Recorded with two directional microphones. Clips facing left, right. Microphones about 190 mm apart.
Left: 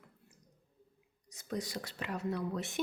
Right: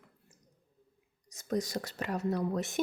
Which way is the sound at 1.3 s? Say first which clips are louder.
Right 6 dB; 45° right (ahead or behind).